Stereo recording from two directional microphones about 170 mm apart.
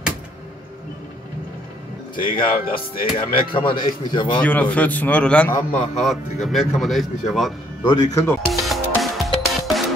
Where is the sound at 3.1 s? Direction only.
30° left (ahead or behind).